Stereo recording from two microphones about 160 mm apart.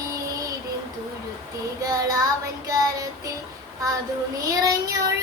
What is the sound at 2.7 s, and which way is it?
Child singing, 20° right (ahead or behind).